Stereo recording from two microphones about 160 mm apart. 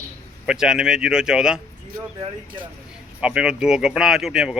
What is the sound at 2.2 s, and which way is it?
Speech, 30° right (ahead or behind).